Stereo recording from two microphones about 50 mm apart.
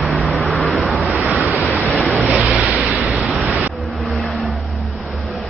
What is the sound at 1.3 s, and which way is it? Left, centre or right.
Waves, right.